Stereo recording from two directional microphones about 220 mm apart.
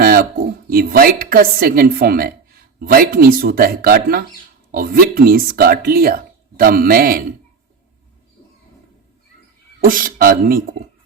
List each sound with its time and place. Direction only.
0.0 s a woman's voice: 45° right (ahead or behind)
9.8 s speech: 40° right (ahead or behind)